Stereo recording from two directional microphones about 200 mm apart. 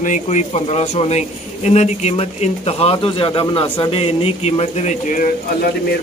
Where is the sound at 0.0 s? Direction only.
40° left (ahead or behind).